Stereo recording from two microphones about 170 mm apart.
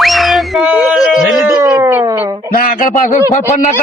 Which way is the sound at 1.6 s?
15° right (ahead or behind).